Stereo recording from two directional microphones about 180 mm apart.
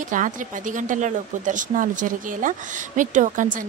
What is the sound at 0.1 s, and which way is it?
A woman's voice, 45° right (ahead or behind).